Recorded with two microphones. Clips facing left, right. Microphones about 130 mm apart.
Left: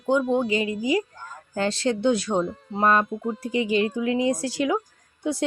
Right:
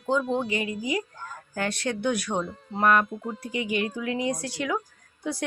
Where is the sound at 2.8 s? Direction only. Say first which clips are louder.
Left 1 dB; 25° left (ahead or behind).